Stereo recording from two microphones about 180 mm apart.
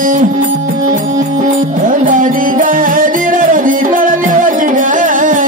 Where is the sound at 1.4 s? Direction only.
45° right (ahead or behind).